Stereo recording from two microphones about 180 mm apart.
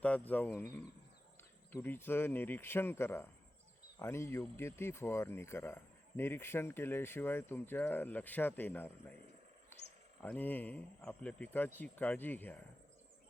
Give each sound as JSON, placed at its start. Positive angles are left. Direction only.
{"t": 0.0, "sound": "speech", "side_deg": 10}
{"t": 10.2, "sound": "speech", "side_deg": 10}